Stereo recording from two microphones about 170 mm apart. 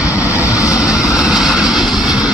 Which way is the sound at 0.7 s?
5° right (ahead or behind).